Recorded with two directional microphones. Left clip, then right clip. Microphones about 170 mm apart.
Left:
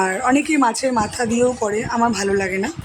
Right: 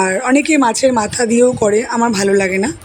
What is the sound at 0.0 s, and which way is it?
Speech, 25° right (ahead or behind).